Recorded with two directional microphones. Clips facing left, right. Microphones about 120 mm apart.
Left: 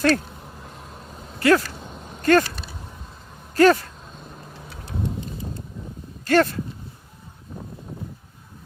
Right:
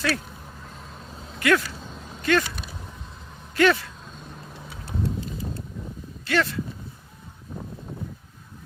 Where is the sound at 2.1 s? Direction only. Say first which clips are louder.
Left 5 dB; 45° left (ahead or behind).